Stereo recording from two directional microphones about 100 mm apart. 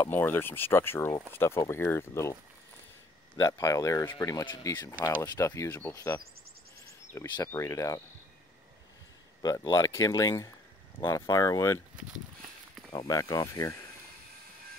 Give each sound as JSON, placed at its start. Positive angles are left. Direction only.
{"t": 0.0, "sound": "speech", "side_deg": 20}
{"t": 3.3, "sound": "speech", "side_deg": 35}
{"t": 7.4, "sound": "speech", "side_deg": 30}
{"t": 9.4, "sound": "speech", "side_deg": 40}
{"t": 12.9, "sound": "speech", "side_deg": 35}